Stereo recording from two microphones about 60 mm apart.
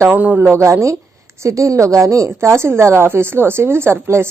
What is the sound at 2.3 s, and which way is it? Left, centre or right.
A woman's voice, right.